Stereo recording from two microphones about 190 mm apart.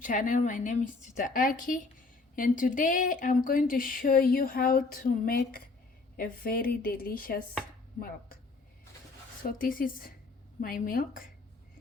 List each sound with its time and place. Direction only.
0.0 s speech: 45° left (ahead or behind)
9.4 s speech: 50° left (ahead or behind)